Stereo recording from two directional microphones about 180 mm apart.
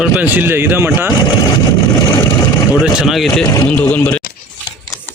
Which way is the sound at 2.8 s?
5° right (ahead or behind).